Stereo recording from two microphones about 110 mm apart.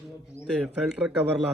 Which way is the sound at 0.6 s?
5° right (ahead or behind).